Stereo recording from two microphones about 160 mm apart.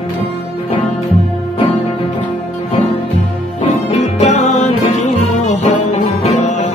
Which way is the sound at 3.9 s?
45° left (ahead or behind).